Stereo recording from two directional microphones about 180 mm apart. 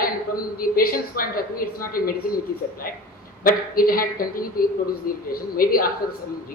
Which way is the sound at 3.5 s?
55° left (ahead or behind).